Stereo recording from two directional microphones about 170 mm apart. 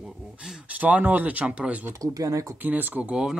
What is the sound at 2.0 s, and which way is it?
Speech, 20° right (ahead or behind).